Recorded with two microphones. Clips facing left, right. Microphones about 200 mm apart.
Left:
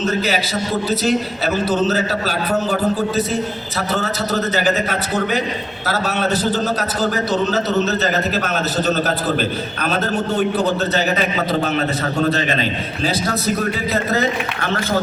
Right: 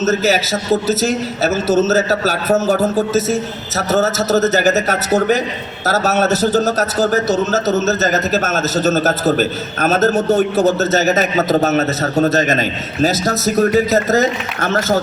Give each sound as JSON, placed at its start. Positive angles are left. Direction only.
{"t": 0.0, "sound": "a man's voice", "side_deg": -40}